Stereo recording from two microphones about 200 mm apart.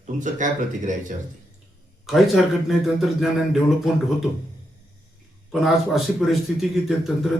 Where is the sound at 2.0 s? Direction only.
Centre (ahead or behind).